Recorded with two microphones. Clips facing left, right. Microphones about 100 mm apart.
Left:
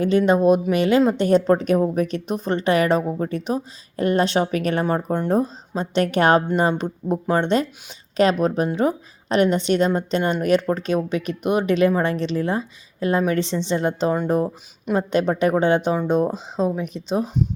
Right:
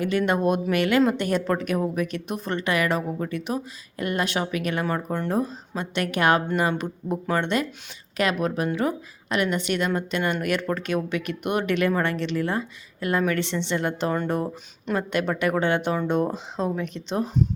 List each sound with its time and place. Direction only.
0.0 s a woman's voice: 30° left (ahead or behind)